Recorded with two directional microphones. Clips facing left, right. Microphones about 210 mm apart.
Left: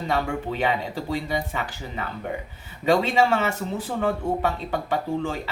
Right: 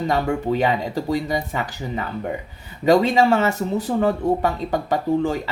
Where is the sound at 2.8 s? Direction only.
40° right (ahead or behind).